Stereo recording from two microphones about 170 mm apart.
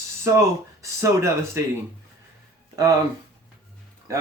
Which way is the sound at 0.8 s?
15° right (ahead or behind).